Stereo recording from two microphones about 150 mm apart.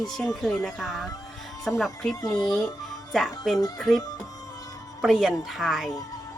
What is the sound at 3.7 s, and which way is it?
Speech, centre (ahead or behind).